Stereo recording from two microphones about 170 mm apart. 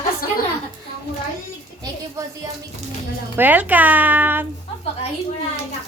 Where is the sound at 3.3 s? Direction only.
10° right (ahead or behind).